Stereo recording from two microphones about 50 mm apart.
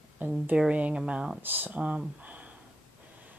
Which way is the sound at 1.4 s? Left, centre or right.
Right.